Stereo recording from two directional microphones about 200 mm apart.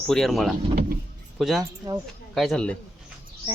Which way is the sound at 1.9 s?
20° right (ahead or behind).